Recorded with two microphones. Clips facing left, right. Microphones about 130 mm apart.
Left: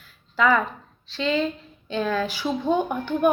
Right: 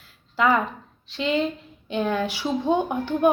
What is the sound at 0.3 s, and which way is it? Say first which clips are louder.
Speech: even; 20° right (ahead or behind).